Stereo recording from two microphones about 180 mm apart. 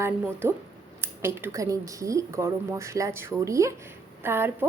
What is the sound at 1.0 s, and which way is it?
A woman's voice, 15° right (ahead or behind).